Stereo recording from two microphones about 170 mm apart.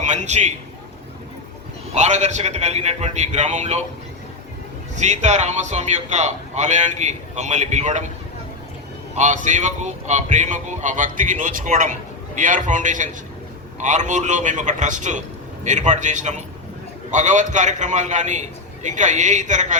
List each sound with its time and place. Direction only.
0.0 s a man's voice: 45° right (ahead or behind)
2.0 s a man's voice: 45° right (ahead or behind)
4.9 s a man's voice: 45° right (ahead or behind)
9.1 s a man's voice: 45° right (ahead or behind)